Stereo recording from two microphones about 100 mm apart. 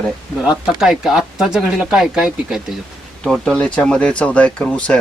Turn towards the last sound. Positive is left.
turn(degrees=10)  # may be behind; listen again after turning